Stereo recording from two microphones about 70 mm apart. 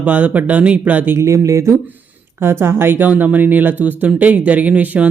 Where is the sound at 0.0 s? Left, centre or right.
Centre.